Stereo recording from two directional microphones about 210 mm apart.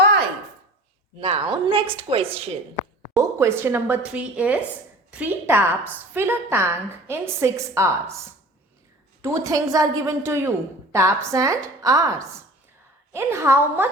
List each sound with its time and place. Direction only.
1.2 s a woman's voice: 25° right (ahead or behind)
3.2 s a woman's voice: 10° right (ahead or behind)
9.2 s a woman's voice: 15° right (ahead or behind)